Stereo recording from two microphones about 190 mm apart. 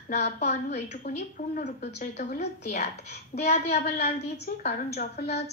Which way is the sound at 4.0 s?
55° left (ahead or behind).